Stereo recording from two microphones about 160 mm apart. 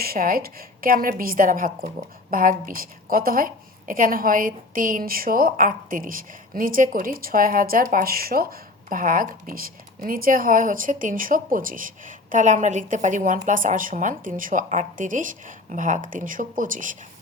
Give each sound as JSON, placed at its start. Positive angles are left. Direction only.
{"t": 0.0, "sound": "a woman's voice", "side_deg": -65}